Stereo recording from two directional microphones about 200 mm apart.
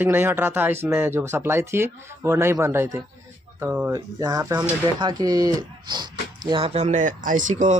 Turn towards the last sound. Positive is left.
turn(degrees=-40)  # may be behind; listen again after turning